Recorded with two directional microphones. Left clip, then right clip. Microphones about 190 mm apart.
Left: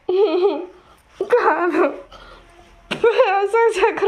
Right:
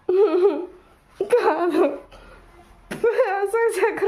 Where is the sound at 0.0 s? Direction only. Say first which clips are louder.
Left 1 dB; 15° right (ahead or behind).